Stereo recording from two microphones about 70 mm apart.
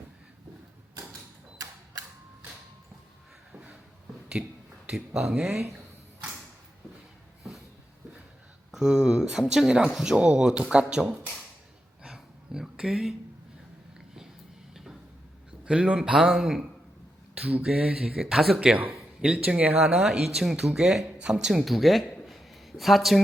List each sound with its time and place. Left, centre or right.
4.4 s speech: centre
5.5 s speech: right
8.7 s speech: centre
12.0 s a sound: centre
14.7 s a sound: centre
15.6 s speech: centre
17.3 s speech: centre
17.6 s speech: centre
18.5 s speech: centre
19.8 s speech: centre